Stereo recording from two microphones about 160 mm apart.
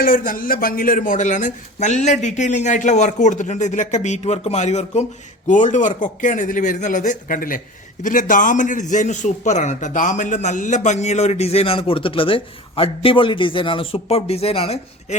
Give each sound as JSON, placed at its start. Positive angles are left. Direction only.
{"t": 0.0, "sound": "a man's voice", "side_deg": 60}